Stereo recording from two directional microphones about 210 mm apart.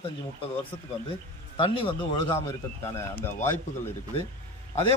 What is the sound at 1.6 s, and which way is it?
Speech, 25° left (ahead or behind).